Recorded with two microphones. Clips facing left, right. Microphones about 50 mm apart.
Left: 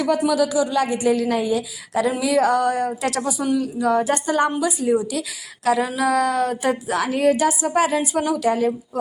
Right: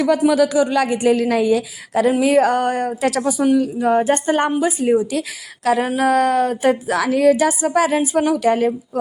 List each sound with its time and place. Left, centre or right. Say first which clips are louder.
0.3 s speech: right 4 dB; right
2.2 s a woman's voice: even; right